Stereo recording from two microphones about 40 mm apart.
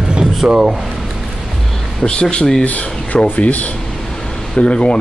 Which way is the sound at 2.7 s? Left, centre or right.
Left.